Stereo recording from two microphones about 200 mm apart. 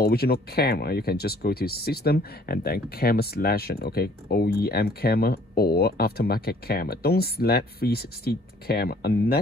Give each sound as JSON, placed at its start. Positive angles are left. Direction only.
{"t": 0.0, "sound": "speech", "side_deg": 50}